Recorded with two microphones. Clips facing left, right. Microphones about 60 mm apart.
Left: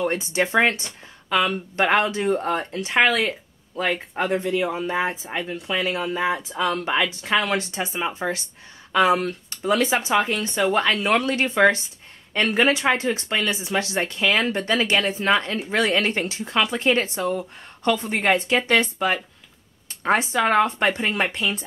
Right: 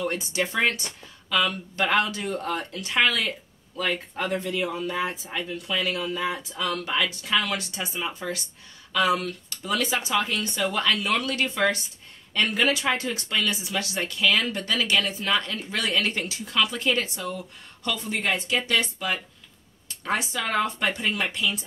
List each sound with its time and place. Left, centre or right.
0.0 s speech: left